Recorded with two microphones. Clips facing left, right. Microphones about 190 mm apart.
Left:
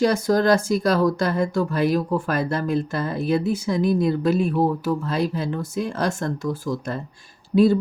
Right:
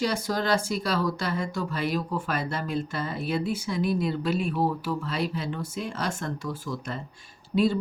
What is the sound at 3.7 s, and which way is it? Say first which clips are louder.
Speech: left 7 dB; 45° left (ahead or behind).